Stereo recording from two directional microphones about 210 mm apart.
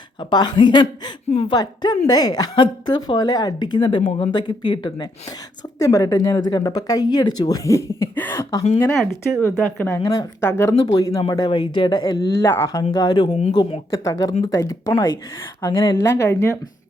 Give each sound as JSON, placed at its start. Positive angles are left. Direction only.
{"t": 0.2, "sound": "speech", "side_deg": 20}
{"t": 13.9, "sound": "speech", "side_deg": 15}